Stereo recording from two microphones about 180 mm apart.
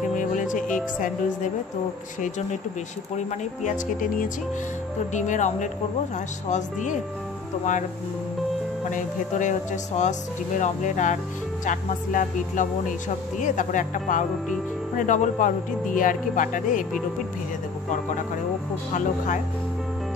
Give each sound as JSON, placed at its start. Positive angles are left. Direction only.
{"t": 0.1, "sound": "music", "side_deg": 45}
{"t": 2.2, "sound": "speech", "side_deg": 45}
{"t": 8.9, "sound": "speech", "side_deg": 45}
{"t": 18.9, "sound": "speech", "side_deg": 45}